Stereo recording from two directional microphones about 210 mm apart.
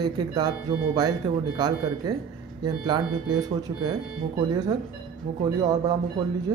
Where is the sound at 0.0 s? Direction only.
20° right (ahead or behind).